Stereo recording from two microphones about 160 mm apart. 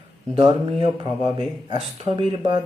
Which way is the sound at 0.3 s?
30° right (ahead or behind).